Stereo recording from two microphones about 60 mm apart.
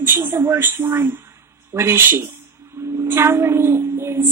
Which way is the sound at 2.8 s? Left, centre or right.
Right.